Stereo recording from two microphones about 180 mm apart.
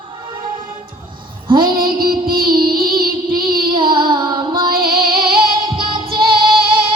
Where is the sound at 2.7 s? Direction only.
55° right (ahead or behind).